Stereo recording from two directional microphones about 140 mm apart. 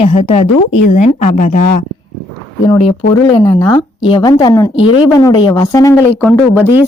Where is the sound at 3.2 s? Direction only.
30° left (ahead or behind).